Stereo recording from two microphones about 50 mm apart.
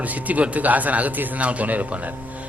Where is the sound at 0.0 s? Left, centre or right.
Right.